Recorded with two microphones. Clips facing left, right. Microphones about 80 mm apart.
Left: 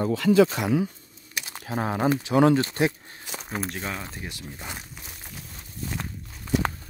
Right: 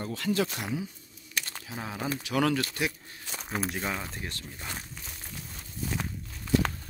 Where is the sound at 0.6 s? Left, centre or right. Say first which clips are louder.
Left 9 dB; left.